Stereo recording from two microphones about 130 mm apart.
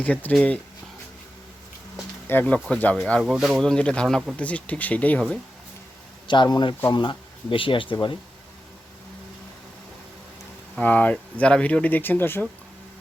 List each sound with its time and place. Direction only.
0.0 s speech: 10° left (ahead or behind)
2.2 s speech: 15° left (ahead or behind)
6.2 s speech: 35° left (ahead or behind)
10.8 s speech: 10° left (ahead or behind)